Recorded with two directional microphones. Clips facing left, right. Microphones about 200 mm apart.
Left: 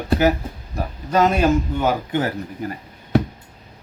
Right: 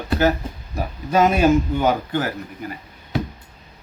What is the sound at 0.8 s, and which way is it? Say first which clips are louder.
Speech: even; 5° right (ahead or behind).